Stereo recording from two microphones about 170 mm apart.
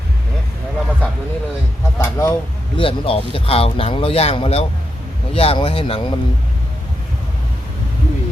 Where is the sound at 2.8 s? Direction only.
30° left (ahead or behind).